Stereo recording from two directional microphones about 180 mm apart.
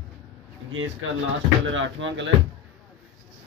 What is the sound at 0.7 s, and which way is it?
Speech, 90° right.